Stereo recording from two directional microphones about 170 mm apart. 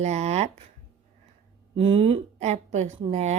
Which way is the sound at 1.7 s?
30° right (ahead or behind).